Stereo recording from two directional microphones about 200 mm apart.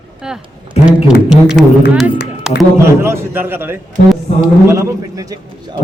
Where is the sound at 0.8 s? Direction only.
Centre (ahead or behind).